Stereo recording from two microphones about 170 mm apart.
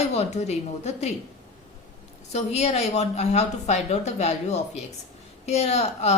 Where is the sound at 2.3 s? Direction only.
40° left (ahead or behind).